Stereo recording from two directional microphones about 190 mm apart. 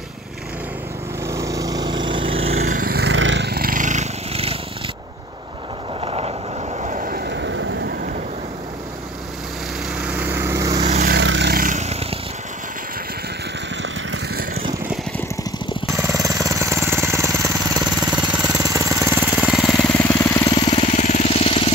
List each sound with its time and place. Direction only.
1.2 s vehicle: 15° right (ahead or behind); by 2.8 s 35° right (ahead or behind)
2.8 s a sound: 55° right (ahead or behind); by 4.6 s 30° right (ahead or behind)
5.9 s vehicle: 30° right (ahead or behind)
6.8 s vehicle: 40° right (ahead or behind); by 7.9 s 75° right (ahead or behind)
9.9 s lawn mower: 5° right (ahead or behind)
11.1 s vehicle: 70° right (ahead or behind)
11.5 s vehicle: 45° right (ahead or behind)
15.9 s vehicle: 15° right (ahead or behind)
18.6 s jackhammer: 15° right (ahead or behind); by 20.0 s 5° left (ahead or behind)
20.0 s vehicle: 15° left (ahead or behind)
20.5 s vehicle: 30° left (ahead or behind)
20.9 s vehicle: 40° left (ahead or behind)